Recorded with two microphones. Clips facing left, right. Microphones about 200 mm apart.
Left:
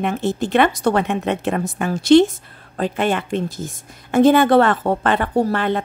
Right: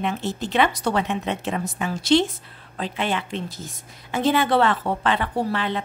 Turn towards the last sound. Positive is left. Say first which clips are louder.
# left 6 dB
turn(degrees=50)  # may be behind; listen again after turning